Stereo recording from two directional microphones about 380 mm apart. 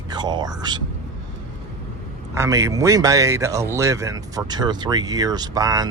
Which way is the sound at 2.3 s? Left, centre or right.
Centre.